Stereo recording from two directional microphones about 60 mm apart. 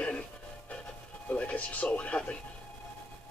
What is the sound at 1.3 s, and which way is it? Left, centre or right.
Speech, left.